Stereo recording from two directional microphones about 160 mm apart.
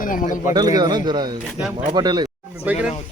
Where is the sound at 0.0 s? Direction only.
60° left (ahead or behind).